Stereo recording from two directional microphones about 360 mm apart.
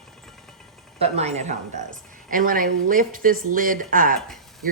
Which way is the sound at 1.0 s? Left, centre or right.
Centre.